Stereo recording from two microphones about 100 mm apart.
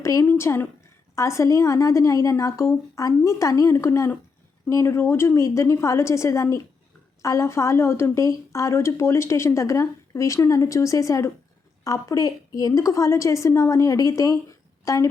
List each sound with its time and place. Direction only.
0.0 s a woman's voice: 30° left (ahead or behind)